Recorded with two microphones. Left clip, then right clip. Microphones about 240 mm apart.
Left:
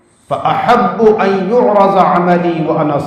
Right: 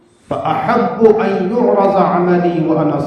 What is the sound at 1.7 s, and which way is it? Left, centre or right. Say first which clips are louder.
Speech: left 3 dB; left.